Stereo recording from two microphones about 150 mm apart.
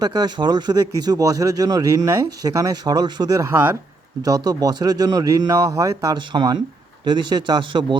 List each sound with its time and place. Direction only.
0.0 s speech: 25° right (ahead or behind)